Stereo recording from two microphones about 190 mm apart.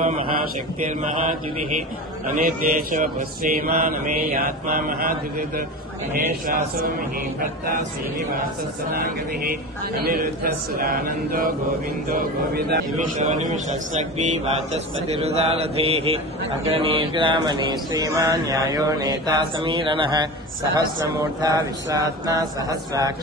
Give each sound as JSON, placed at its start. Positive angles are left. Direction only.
{"t": 2.2, "sound": "speech", "side_deg": -45}
{"t": 8.9, "sound": "a man's voice", "side_deg": -50}
{"t": 13.2, "sound": "mantra", "side_deg": -40}